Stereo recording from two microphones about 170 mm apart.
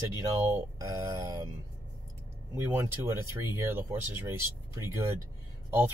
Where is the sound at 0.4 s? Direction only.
20° right (ahead or behind).